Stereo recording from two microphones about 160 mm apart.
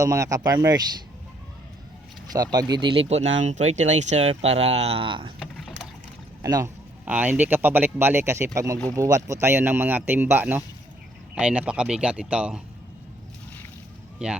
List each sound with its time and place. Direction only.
0.0 s speech: 20° right (ahead or behind)
2.3 s speech: 25° right (ahead or behind)
3.1 s speech: 45° right (ahead or behind)
5.4 s mechanisms: centre (ahead or behind)
6.4 s speech: 20° right (ahead or behind)
7.0 s speech: 10° right (ahead or behind)